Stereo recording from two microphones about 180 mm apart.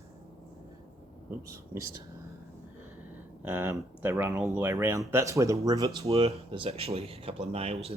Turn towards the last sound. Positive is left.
turn(degrees=-35)  # may be behind; listen again after turning